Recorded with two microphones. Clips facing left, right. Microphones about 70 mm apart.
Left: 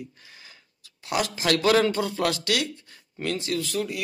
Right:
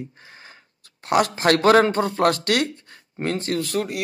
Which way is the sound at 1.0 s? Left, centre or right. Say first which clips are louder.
Right 6 dB; right.